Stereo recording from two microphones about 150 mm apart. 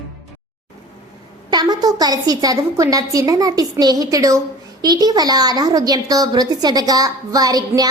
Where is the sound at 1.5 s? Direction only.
25° right (ahead or behind).